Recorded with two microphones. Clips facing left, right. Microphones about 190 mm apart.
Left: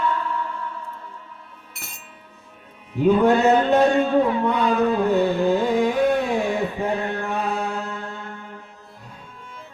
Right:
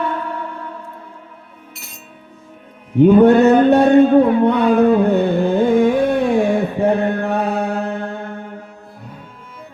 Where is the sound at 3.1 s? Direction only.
60° right (ahead or behind).